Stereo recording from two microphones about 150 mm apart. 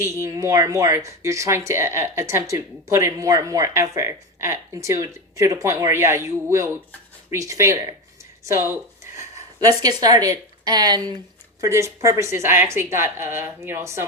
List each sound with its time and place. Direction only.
0.0 s speech: 20° right (ahead or behind)
9.1 s a sound: 25° right (ahead or behind)
10.0 s a woman's voice: 25° right (ahead or behind)